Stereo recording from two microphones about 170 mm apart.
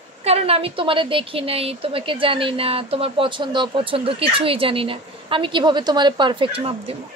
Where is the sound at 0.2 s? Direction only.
35° right (ahead or behind).